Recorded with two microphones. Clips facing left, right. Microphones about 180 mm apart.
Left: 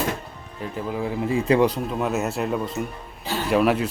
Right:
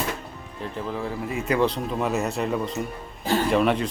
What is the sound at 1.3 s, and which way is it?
Speech, 30° left (ahead or behind).